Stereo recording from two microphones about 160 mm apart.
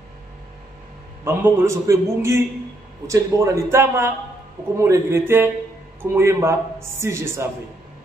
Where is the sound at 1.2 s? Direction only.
15° right (ahead or behind).